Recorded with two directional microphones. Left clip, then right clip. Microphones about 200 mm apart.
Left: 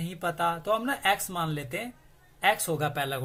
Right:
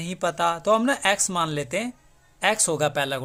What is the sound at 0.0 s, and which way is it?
A man's voice, 45° right (ahead or behind).